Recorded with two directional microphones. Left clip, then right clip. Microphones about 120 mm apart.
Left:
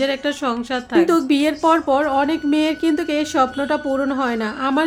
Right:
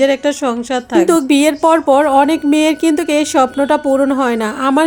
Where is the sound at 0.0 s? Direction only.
30° right (ahead or behind).